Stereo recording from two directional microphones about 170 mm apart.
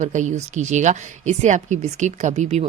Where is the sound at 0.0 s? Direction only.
45° right (ahead or behind).